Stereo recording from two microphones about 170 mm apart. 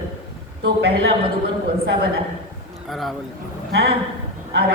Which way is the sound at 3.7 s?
70° right (ahead or behind).